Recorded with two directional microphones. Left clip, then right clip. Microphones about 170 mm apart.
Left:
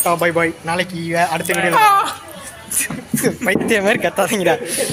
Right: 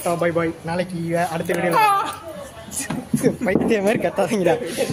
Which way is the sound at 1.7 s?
30° left (ahead or behind).